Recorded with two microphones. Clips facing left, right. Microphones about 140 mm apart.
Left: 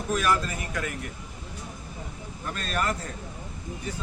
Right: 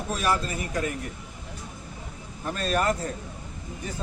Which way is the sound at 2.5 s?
35° right (ahead or behind).